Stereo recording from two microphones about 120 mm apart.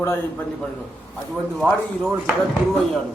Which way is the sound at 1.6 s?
Centre (ahead or behind).